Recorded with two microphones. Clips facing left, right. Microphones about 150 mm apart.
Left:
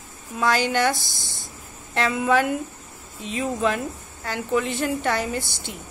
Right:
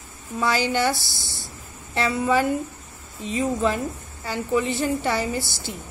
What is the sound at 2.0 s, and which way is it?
Speech, 5° right (ahead or behind).